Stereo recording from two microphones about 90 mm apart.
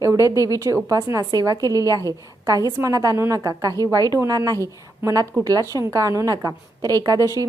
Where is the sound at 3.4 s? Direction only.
45° right (ahead or behind).